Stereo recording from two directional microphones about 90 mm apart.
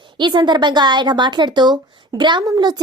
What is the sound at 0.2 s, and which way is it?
A woman's voice, 60° right (ahead or behind).